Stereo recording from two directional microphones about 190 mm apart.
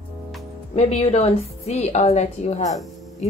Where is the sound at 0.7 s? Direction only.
35° left (ahead or behind).